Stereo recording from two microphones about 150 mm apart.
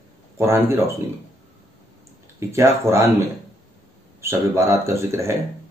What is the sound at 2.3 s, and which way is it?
A man's voice, 20° right (ahead or behind).